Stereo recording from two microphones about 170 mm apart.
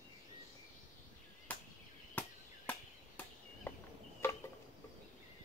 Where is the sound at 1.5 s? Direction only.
10° left (ahead or behind).